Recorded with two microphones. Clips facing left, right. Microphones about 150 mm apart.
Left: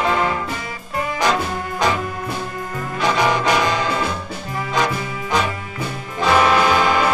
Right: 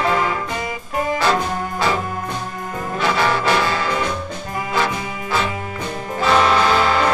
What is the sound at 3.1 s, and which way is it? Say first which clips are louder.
Brass instrument: left 1 dB; 15° left (ahead or behind).